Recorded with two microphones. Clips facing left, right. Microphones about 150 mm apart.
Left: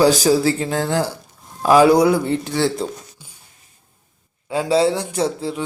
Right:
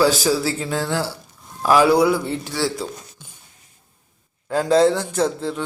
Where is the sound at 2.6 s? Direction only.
20° left (ahead or behind).